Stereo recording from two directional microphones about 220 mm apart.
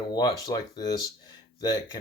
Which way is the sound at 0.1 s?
20° left (ahead or behind).